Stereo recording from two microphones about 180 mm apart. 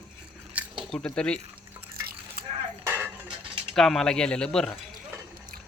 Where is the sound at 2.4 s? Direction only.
55° right (ahead or behind).